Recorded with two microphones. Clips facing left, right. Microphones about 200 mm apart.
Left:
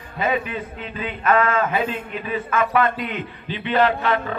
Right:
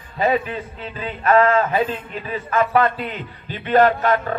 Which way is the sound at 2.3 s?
40° right (ahead or behind).